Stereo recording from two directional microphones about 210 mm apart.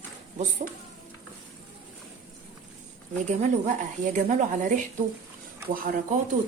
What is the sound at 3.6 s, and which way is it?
A woman's voice, 35° right (ahead or behind).